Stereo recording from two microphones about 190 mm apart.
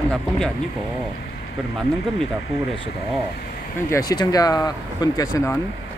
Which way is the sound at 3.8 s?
20° left (ahead or behind).